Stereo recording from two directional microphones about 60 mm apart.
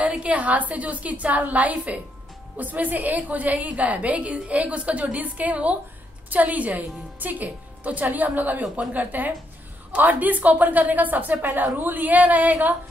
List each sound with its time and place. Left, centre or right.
0.1 s a woman's voice: right